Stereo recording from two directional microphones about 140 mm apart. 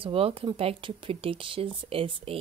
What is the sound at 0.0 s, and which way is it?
Speech, 45° right (ahead or behind).